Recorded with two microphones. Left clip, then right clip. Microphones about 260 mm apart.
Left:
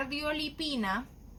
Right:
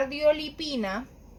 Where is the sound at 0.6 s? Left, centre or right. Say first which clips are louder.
Right 2 dB; centre.